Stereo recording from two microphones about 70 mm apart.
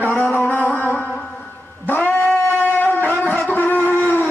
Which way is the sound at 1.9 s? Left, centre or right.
Left.